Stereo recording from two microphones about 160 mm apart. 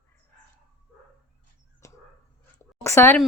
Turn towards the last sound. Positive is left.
turn(degrees=15)  # may be behind; listen again after turning